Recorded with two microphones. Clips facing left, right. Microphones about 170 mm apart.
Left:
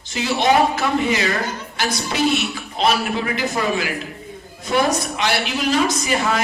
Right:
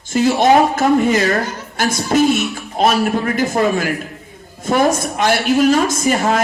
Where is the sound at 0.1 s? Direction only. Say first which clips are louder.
Right 6 dB; 50° right (ahead or behind).